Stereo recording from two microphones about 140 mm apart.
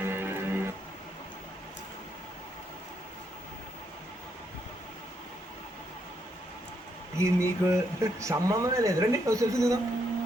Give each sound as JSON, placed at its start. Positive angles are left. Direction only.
{"t": 0.0, "sound": "music", "side_deg": -15}
{"t": 7.2, "sound": "speech", "side_deg": -20}